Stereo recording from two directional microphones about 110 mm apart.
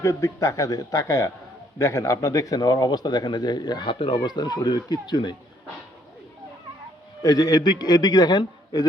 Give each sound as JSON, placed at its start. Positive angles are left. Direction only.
{"t": 0.0, "sound": "a man's voice", "side_deg": 30}
{"t": 4.2, "sound": "speech", "side_deg": 40}
{"t": 7.2, "sound": "speech", "side_deg": 35}